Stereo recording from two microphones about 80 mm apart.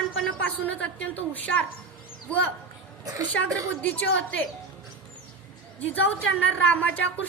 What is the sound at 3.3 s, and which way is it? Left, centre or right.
Speech, centre.